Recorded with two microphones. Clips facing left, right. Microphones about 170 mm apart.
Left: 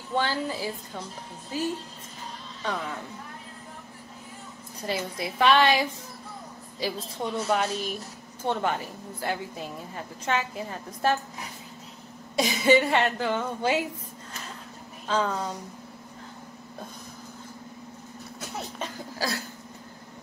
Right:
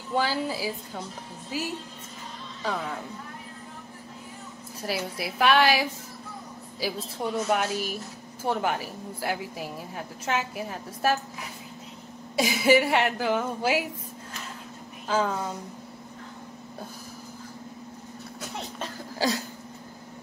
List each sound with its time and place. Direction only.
0.1 s a woman's voice: 10° right (ahead or behind)
4.8 s a woman's voice: 5° right (ahead or behind)
12.4 s a woman's voice: 5° right (ahead or behind)
15.0 s a woman's voice: 5° right (ahead or behind)
19.1 s a sound: 20° right (ahead or behind)